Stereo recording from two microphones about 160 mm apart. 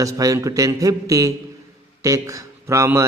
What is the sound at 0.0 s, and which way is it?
A man's voice, 20° right (ahead or behind).